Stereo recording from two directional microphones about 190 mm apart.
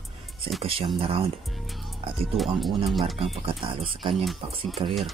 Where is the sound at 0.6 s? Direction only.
30° right (ahead or behind).